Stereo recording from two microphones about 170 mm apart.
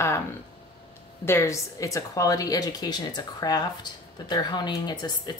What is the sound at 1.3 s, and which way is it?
A woman's voice, 15° left (ahead or behind).